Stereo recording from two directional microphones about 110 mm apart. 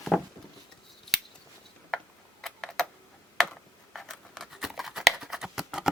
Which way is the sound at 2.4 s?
5° left (ahead or behind).